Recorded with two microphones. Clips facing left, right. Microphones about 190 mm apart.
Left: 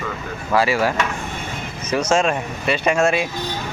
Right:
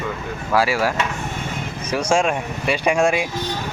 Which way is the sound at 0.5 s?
5° right (ahead or behind).